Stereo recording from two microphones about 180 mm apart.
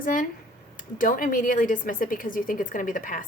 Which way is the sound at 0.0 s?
50° left (ahead or behind).